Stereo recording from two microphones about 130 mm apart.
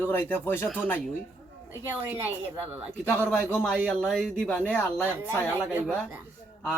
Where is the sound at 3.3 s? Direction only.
5° left (ahead or behind).